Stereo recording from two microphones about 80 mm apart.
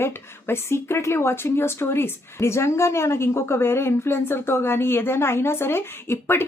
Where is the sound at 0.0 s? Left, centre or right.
Left.